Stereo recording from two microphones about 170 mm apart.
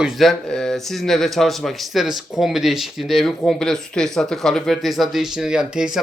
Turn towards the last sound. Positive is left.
turn(degrees=-5)  # may be behind; listen again after turning